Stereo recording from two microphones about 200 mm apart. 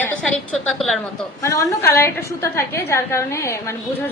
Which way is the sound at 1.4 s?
15° left (ahead or behind).